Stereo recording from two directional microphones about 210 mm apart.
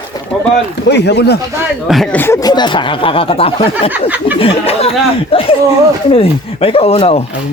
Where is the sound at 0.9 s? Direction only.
55° left (ahead or behind).